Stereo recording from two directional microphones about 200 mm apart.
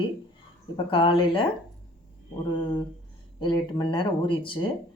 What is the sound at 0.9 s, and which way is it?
Speech, 25° left (ahead or behind).